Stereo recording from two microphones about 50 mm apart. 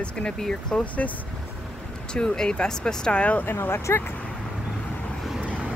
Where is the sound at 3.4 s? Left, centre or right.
Left.